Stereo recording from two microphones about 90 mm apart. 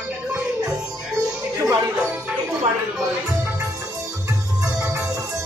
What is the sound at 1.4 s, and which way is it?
Music, 35° right (ahead or behind).